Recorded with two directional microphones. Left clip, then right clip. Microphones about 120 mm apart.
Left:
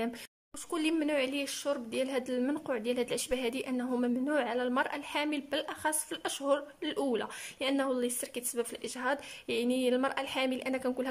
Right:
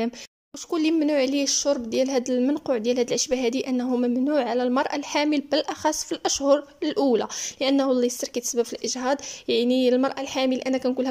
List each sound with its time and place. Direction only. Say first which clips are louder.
0.7 s a woman's voice: right 9 dB; 30° right (ahead or behind)